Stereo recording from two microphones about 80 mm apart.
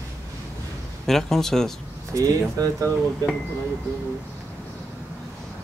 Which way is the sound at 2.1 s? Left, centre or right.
Right.